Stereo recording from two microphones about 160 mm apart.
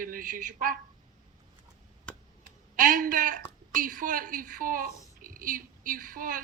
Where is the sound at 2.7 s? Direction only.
60° right (ahead or behind).